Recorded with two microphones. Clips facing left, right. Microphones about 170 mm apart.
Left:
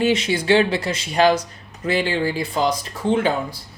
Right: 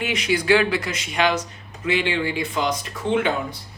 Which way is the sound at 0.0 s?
30° left (ahead or behind).